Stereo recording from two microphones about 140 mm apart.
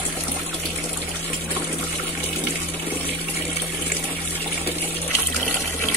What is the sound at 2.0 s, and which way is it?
Water, 15° left (ahead or behind).